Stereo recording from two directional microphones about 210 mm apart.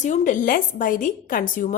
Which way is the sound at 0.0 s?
35° left (ahead or behind).